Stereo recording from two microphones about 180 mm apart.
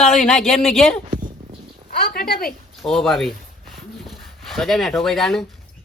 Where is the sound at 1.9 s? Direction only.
60° left (ahead or behind).